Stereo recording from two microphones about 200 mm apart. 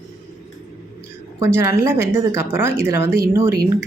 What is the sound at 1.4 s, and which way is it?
A woman's voice, 10° right (ahead or behind).